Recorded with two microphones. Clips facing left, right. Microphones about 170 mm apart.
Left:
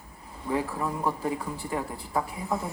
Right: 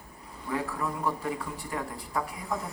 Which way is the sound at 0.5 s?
25° left (ahead or behind).